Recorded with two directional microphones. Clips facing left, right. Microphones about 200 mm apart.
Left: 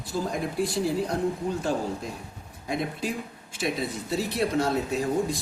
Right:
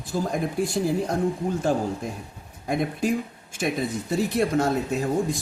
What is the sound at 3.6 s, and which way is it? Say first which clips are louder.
Speech: right 3 dB; 50° right (ahead or behind).